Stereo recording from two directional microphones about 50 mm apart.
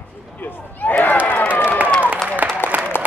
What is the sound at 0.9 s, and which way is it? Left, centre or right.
Crowd, left.